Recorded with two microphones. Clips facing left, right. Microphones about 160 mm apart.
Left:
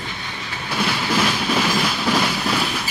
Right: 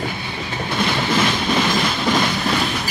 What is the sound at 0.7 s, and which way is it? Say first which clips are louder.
Train: right 1 dB; 10° left (ahead or behind).